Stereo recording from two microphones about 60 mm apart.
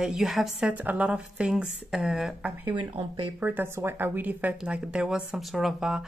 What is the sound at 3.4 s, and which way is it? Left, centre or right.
A woman's voice, right.